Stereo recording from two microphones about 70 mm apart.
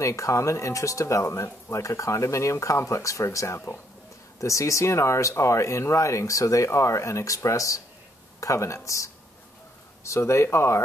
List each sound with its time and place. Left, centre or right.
0.0 s speech: left